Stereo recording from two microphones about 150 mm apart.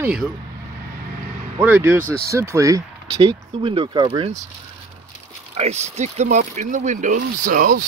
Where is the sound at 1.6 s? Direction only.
10° right (ahead or behind).